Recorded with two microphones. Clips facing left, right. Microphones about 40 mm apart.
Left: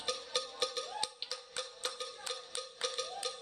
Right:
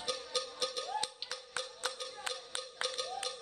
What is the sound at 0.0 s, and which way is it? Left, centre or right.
Music, left.